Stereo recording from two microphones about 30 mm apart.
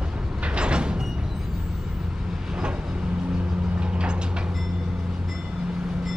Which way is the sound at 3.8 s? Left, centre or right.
Right.